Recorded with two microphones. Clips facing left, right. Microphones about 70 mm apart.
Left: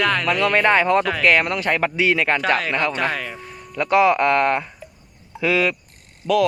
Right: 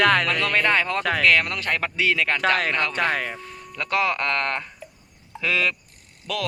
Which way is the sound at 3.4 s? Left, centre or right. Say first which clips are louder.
Left 6 dB; centre.